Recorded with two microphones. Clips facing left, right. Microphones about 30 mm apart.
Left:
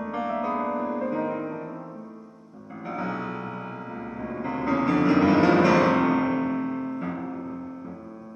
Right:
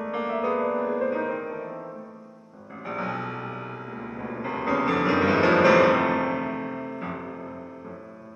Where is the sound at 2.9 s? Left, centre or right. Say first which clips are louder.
Even; centre.